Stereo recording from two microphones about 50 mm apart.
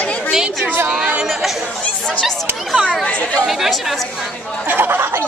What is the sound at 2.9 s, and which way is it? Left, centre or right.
Speech, left.